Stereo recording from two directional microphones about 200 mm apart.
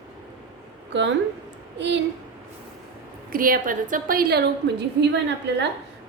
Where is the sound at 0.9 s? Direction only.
65° right (ahead or behind).